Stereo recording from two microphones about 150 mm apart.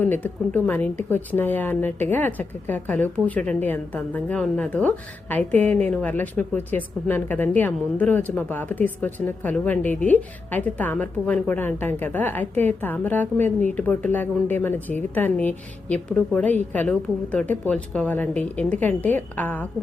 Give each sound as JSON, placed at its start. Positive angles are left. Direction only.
{"t": 0.0, "sound": "a woman's voice", "side_deg": 10}